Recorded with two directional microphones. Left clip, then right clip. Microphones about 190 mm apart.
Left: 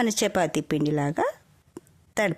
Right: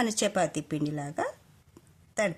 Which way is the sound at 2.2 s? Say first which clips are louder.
Left 4 dB; 45° left (ahead or behind).